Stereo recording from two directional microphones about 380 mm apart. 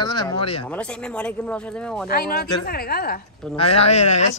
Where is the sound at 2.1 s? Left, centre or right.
Left.